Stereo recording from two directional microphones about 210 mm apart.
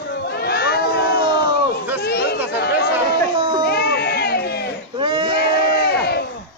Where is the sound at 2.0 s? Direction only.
50° left (ahead or behind).